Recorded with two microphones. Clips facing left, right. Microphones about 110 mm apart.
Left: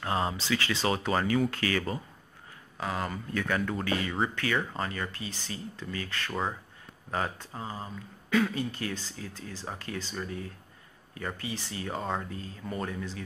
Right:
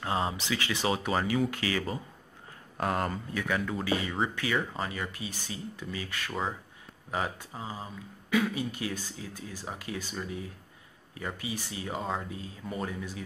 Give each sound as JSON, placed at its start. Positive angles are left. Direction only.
{"t": 0.0, "sound": "speech", "side_deg": -20}
{"t": 2.8, "sound": "speech", "side_deg": -55}
{"t": 3.3, "sound": "a man's voice", "side_deg": -5}
{"t": 12.0, "sound": "a man's voice", "side_deg": 0}
{"t": 12.3, "sound": "speech", "side_deg": -15}